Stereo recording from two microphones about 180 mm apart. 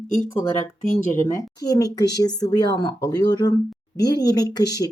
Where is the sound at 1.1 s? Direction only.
15° left (ahead or behind).